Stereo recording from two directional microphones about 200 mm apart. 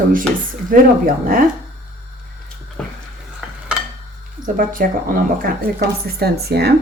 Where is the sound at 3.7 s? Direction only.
5° right (ahead or behind).